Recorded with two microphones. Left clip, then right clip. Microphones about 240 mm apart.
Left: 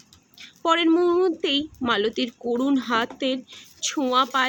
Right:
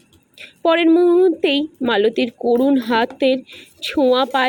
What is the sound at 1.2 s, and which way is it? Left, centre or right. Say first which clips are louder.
Speech: right 7 dB; centre.